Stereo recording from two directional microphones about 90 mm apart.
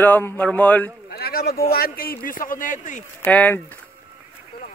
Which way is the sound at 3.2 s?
20° left (ahead or behind).